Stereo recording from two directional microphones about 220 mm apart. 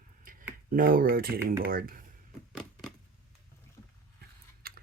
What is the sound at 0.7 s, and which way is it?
Speech, 40° right (ahead or behind).